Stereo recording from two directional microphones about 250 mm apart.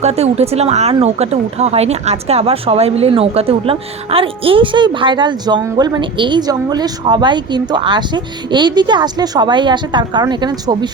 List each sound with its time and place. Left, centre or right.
0.0 s speech: right